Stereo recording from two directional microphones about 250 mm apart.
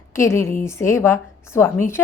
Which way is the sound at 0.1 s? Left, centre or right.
Centre.